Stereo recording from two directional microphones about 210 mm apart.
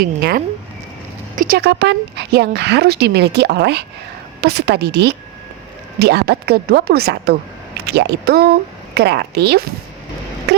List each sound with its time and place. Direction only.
0.0 s a woman's voice: 45° right (ahead or behind)